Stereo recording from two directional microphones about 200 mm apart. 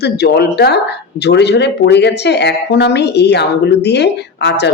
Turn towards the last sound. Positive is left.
turn(degrees=60)  # may be behind; listen again after turning